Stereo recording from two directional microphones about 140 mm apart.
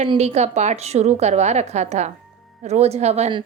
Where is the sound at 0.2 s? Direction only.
50° right (ahead or behind).